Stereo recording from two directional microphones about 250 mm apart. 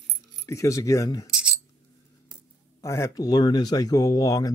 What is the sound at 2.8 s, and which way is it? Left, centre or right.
Speech, centre.